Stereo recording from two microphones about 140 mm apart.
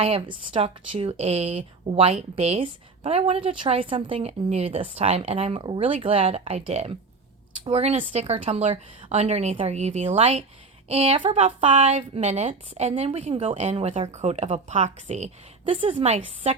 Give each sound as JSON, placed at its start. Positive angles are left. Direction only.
{"t": 0.0, "sound": "speech", "side_deg": -40}
{"t": 15.7, "sound": "a woman's voice", "side_deg": -40}
{"t": 16.1, "sound": "speech", "side_deg": -50}